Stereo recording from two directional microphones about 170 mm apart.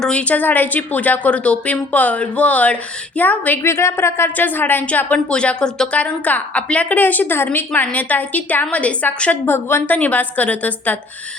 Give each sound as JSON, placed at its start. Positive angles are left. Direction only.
{"t": 0.0, "sound": "a woman's voice", "side_deg": 5}